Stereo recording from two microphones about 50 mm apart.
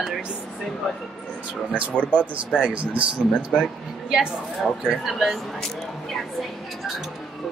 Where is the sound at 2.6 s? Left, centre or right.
Right.